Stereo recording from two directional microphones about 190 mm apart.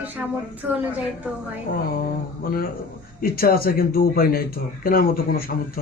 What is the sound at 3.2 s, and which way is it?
A man's voice, 50° left (ahead or behind).